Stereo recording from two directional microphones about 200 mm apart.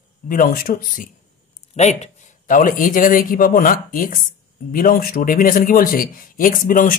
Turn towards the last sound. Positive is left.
turn(degrees=40)  # may be behind; listen again after turning